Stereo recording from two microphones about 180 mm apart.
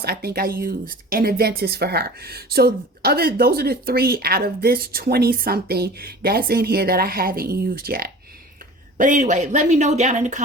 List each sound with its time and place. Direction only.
0.0 s speech: 60° right (ahead or behind); by 10.4 s 40° right (ahead or behind)